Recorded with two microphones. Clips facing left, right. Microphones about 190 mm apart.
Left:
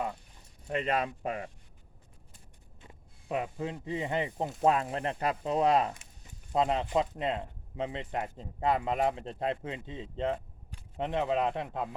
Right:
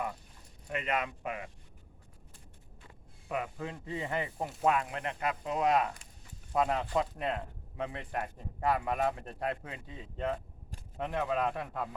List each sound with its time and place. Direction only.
0.7 s speech: 30° left (ahead or behind)
2.8 s speech: 25° left (ahead or behind)